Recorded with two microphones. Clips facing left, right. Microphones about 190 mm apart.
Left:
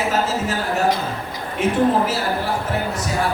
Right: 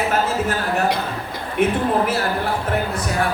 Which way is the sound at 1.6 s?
55° right (ahead or behind).